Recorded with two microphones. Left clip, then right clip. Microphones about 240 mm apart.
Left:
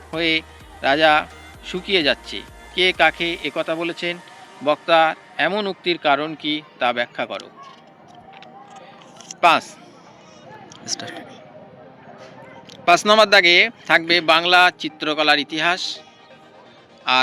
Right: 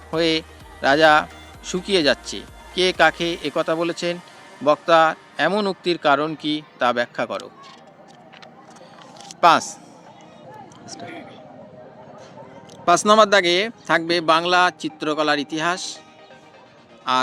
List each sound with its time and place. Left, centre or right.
0.1 s a man's voice: right
9.4 s a man's voice: right
10.8 s speech: left
12.8 s a man's voice: right
17.1 s a man's voice: right